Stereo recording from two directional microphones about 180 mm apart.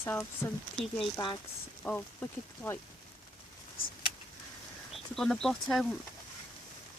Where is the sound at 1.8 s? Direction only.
10° left (ahead or behind).